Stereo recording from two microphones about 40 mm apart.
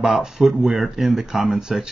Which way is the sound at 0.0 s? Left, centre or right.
Centre.